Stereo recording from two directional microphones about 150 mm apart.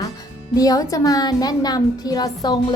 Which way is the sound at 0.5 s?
25° left (ahead or behind).